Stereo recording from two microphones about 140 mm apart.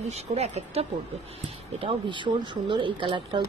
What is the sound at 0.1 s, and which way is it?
Speech, 50° right (ahead or behind).